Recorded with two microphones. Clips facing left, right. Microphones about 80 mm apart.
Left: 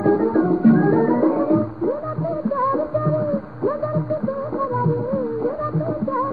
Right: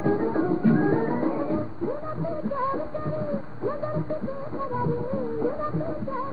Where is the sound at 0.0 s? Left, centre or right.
Left.